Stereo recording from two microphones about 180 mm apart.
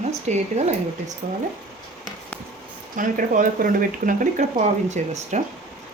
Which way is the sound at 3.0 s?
45° right (ahead or behind).